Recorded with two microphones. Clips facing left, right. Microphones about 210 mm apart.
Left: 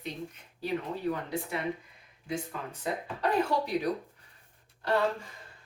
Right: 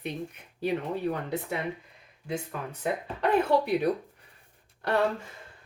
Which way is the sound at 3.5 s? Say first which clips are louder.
Right 6 dB; 60° right (ahead or behind).